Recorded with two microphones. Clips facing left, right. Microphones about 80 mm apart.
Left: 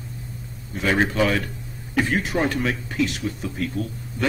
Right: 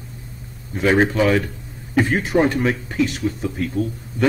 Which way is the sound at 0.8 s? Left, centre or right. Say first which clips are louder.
Right 4 dB; centre.